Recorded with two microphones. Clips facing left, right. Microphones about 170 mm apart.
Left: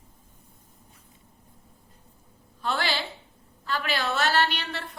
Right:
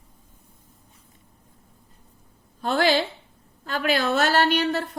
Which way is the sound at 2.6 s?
45° right (ahead or behind).